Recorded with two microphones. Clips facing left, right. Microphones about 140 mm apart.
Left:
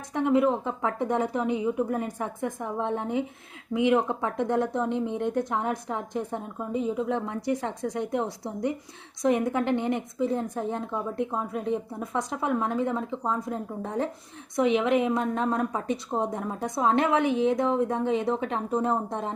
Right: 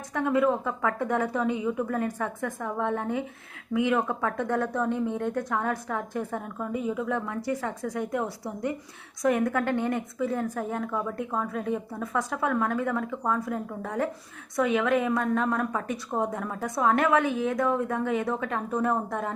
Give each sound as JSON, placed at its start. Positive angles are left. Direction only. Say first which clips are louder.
{"t": 0.1, "sound": "a woman's voice", "louder": "left 1 dB", "side_deg": 20}